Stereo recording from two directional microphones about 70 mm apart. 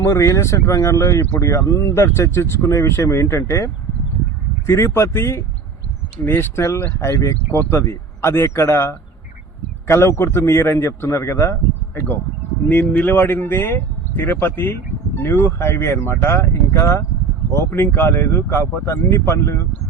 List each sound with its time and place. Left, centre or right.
0.0 s speech: left
12.6 s speech: left